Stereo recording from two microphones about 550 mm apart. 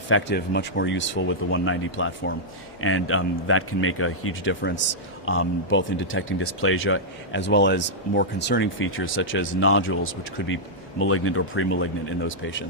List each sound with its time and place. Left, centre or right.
0.1 s speech: centre